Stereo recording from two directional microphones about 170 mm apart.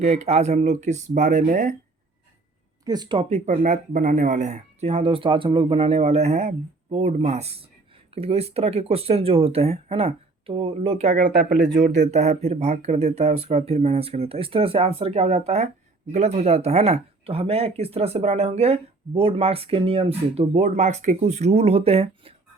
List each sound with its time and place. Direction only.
0.0 s speech: 40° right (ahead or behind)
2.8 s speech: 25° right (ahead or behind); by 11.3 s 40° right (ahead or behind)
11.3 s speech: 65° right (ahead or behind)
12.1 s speech: 40° right (ahead or behind)